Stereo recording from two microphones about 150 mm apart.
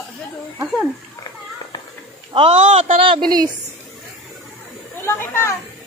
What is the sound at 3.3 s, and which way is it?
Speech, 25° right (ahead or behind).